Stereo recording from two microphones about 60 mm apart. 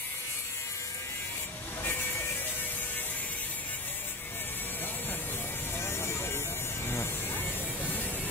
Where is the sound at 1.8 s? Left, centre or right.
Left.